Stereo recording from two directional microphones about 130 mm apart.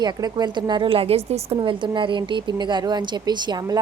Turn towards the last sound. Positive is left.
turn(degrees=-30)  # may be behind; listen again after turning